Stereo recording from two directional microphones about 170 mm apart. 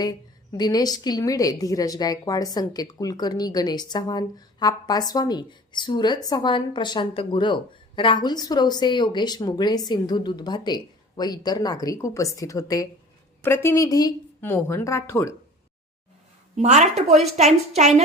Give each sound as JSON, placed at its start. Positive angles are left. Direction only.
{"t": 0.0, "sound": "a woman's voice", "side_deg": 25}
{"t": 16.6, "sound": "a woman's voice", "side_deg": -45}